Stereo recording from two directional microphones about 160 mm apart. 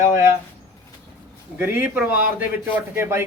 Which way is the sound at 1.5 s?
10° right (ahead or behind).